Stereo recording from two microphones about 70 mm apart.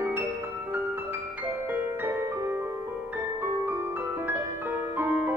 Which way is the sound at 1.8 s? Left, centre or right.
Right.